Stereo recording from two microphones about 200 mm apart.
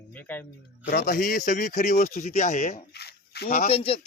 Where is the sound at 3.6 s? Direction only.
30° left (ahead or behind).